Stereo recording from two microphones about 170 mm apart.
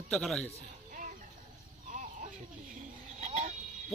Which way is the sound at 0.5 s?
50° right (ahead or behind).